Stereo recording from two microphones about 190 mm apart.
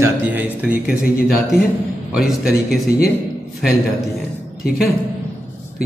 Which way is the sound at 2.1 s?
Centre (ahead or behind).